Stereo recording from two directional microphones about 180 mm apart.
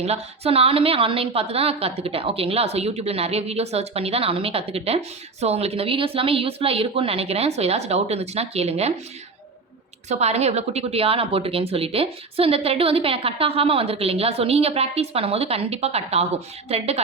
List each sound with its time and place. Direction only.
0.0 s a woman's voice: 35° right (ahead or behind)
10.1 s a woman's voice: 35° right (ahead or behind)